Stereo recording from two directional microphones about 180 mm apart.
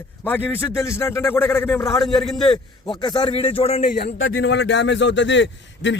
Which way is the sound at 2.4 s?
20° left (ahead or behind).